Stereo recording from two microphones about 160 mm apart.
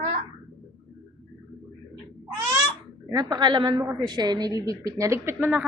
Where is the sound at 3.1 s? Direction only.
25° right (ahead or behind).